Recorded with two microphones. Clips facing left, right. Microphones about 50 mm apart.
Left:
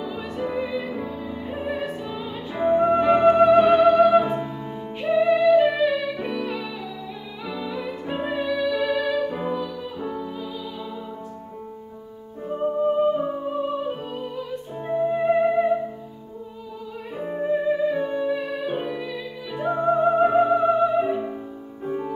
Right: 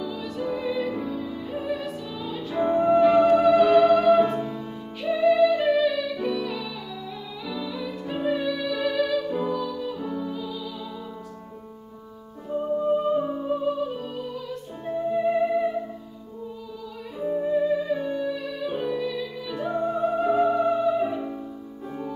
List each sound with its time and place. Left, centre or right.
0.0 s music: left
0.7 s music: centre; by 3.8 s left
3.8 s music: centre
5.0 s music: left
5.9 s music: left
9.0 s music: left
12.4 s music: left
13.2 s music: centre; by 15.7 s left
17.2 s music: left